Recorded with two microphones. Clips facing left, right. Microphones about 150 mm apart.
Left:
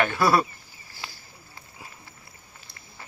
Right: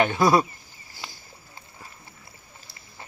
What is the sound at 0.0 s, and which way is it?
Speech, 20° right (ahead or behind).